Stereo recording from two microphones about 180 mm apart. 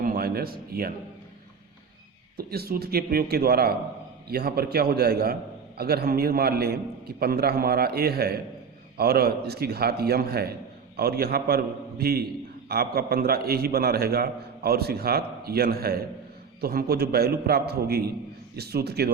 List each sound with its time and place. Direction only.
0.0 s speech: 55° right (ahead or behind)
2.5 s a man's voice: 60° right (ahead or behind)